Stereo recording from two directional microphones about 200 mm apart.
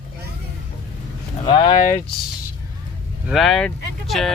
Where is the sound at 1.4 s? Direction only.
20° left (ahead or behind).